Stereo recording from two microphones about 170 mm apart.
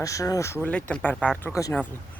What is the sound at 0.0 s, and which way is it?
Speech, 20° left (ahead or behind).